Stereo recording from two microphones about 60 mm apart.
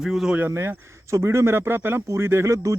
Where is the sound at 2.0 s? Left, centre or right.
Right.